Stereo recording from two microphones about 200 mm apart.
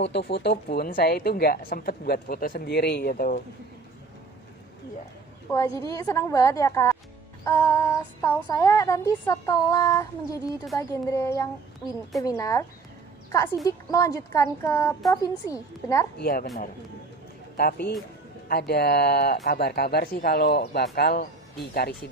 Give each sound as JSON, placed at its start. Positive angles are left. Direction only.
{"t": 0.0, "sound": "a woman's voice", "side_deg": 55}
{"t": 5.5, "sound": "a sound", "side_deg": 15}
{"t": 16.2, "sound": "a woman's voice", "side_deg": 50}
{"t": 17.6, "sound": "a woman's voice", "side_deg": 55}